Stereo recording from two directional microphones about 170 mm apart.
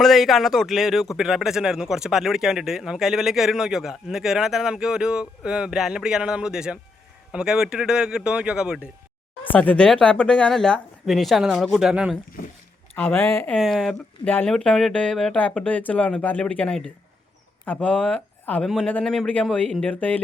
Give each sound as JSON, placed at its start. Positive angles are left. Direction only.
{"t": 0.0, "sound": "a man's voice", "side_deg": 0}
{"t": 9.5, "sound": "a man's voice", "side_deg": 10}
{"t": 12.4, "sound": "a sound", "side_deg": 55}
{"t": 13.0, "sound": "speech", "side_deg": 10}
{"t": 13.6, "sound": "speech", "side_deg": 0}